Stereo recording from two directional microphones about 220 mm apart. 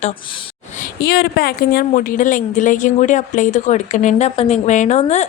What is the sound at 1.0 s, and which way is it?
A woman's voice, 45° left (ahead or behind).